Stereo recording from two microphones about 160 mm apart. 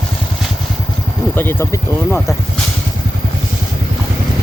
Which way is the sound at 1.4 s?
15° left (ahead or behind).